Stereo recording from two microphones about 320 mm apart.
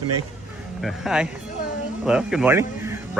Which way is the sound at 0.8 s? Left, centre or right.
Centre.